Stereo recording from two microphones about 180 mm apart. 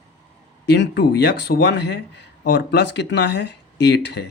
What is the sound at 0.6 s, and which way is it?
Speech, 70° left (ahead or behind).